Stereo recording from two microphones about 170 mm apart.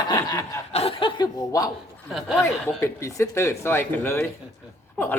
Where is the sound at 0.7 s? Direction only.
35° left (ahead or behind).